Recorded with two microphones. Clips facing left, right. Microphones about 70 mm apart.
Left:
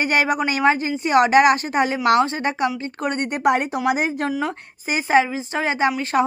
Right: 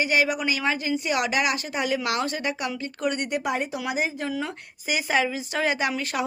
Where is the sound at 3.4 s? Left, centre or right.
Left.